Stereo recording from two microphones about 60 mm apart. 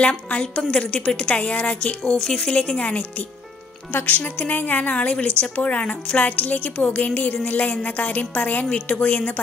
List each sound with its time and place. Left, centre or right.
0.0 s a woman's voice: centre